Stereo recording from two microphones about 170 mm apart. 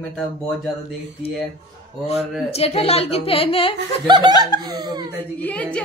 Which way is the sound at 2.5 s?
35° left (ahead or behind).